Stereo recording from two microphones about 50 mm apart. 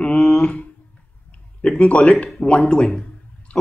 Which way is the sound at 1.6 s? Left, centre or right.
Left.